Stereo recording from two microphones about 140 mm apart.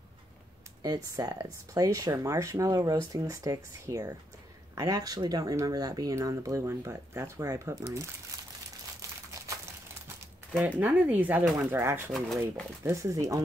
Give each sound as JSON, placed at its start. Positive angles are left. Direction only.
{"t": 0.8, "sound": "speech", "side_deg": -25}
{"t": 10.6, "sound": "speech", "side_deg": -10}
{"t": 12.1, "sound": "speech", "side_deg": 0}
{"t": 12.8, "sound": "speech", "side_deg": -20}